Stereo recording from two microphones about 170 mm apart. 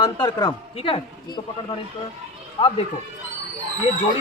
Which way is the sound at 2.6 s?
35° left (ahead or behind).